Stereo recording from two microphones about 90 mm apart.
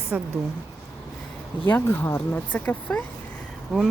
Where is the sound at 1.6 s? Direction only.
20° left (ahead or behind).